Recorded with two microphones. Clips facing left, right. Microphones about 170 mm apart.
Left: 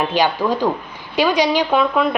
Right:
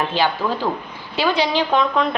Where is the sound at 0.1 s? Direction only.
15° left (ahead or behind).